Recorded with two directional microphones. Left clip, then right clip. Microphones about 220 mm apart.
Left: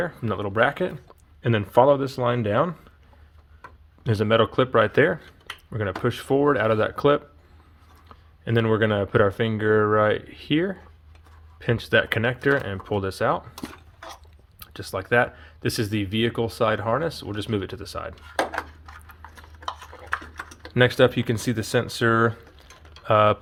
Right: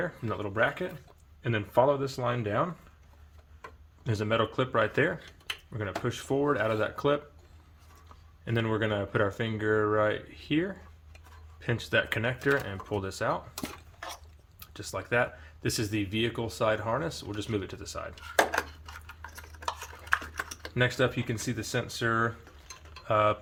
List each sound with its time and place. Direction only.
0.0 s speech: 40° left (ahead or behind)
4.0 s speech: 40° left (ahead or behind)
8.4 s speech: 35° left (ahead or behind)
14.6 s speech: 35° left (ahead or behind)
20.7 s speech: 40° left (ahead or behind)